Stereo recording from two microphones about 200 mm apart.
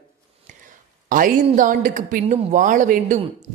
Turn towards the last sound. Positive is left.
turn(degrees=-40)  # may be behind; listen again after turning